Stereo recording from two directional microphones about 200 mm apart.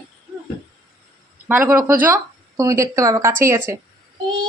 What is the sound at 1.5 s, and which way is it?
Speech, 10° right (ahead or behind).